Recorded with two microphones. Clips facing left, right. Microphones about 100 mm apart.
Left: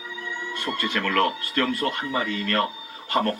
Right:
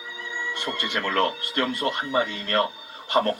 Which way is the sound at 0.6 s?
25° right (ahead or behind).